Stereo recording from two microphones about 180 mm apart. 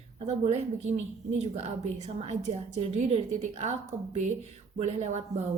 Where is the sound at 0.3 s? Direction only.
40° right (ahead or behind).